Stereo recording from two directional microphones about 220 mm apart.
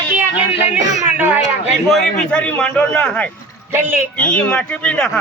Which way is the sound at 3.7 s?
10° right (ahead or behind).